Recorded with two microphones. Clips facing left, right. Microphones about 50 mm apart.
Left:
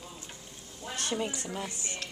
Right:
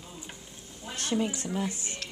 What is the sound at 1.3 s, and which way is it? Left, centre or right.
Speech, centre.